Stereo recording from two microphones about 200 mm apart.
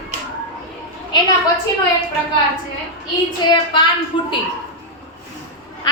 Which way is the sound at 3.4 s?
25° left (ahead or behind).